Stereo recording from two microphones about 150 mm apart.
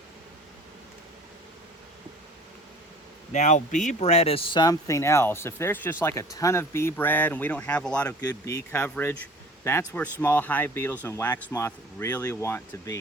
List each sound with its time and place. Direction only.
3.3 s speech: 50° left (ahead or behind); by 8.1 s 5° left (ahead or behind)
8.2 s speech: 25° left (ahead or behind)